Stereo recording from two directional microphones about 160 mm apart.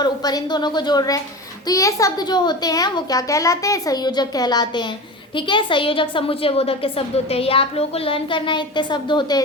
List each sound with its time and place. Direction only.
0.0 s a child's voice: 25° left (ahead or behind)